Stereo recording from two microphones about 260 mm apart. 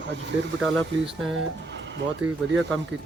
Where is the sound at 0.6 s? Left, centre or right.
Centre.